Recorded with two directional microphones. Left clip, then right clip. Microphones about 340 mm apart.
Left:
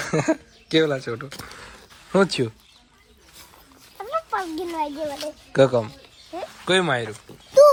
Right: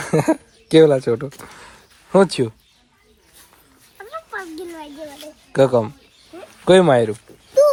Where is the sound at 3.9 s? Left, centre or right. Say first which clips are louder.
Left 5 dB; centre.